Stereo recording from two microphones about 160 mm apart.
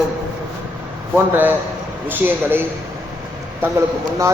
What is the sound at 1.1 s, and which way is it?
A man's voice, 10° right (ahead or behind).